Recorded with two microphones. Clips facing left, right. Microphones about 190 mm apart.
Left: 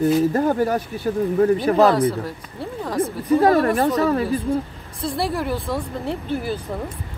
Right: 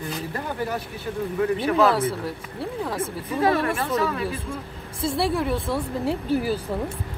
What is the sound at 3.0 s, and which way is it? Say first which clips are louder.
Speech: left 8 dB; 40° left (ahead or behind).